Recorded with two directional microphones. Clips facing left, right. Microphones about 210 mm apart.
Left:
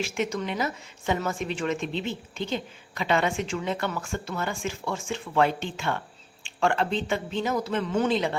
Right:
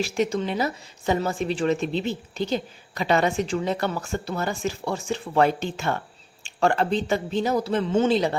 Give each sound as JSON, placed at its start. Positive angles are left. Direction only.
{"t": 0.0, "sound": "a woman's voice", "side_deg": -35}